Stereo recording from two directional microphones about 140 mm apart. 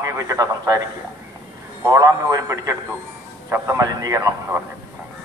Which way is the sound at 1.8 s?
25° right (ahead or behind).